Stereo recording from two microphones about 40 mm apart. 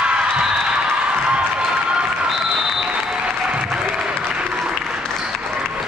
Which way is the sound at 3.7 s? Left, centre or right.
Right.